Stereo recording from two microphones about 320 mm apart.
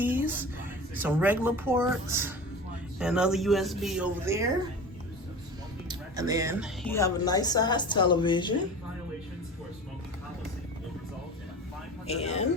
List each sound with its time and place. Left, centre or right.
0.0 s a sound: centre
0.9 s a woman's voice: centre
5.9 s speech: centre
6.8 s a woman's voice: centre
12.0 s speech: centre